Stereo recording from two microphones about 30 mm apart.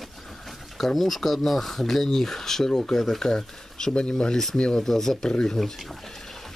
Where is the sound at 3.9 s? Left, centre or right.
Left.